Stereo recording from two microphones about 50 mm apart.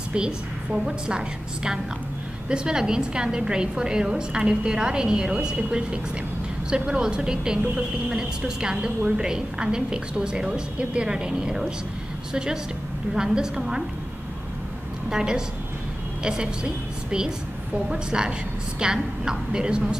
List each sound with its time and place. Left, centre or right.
0.1 s a woman's voice: centre
15.0 s a woman's voice: centre